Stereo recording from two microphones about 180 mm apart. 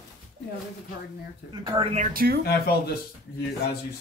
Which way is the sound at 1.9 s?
50° right (ahead or behind).